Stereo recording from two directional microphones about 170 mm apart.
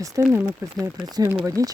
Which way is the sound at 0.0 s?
20° right (ahead or behind).